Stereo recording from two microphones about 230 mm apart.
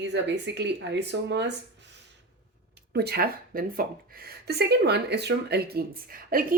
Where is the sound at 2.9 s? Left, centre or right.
Right.